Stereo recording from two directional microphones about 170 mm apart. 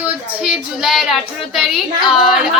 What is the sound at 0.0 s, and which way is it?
Child singing, 10° right (ahead or behind).